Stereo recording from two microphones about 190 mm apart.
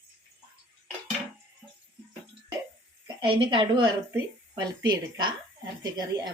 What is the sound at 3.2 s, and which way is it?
Speech, 25° right (ahead or behind).